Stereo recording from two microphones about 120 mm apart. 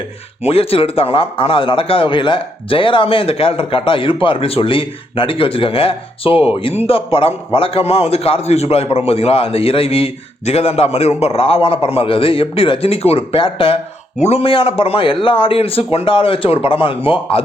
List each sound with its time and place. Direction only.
0.4 s a man's voice: 55° left (ahead or behind)
14.2 s a man's voice: 60° left (ahead or behind)